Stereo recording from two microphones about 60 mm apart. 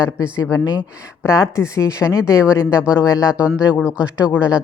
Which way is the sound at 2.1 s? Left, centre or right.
Left.